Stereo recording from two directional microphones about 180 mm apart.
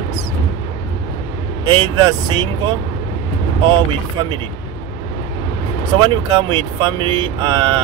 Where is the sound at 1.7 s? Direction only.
25° right (ahead or behind).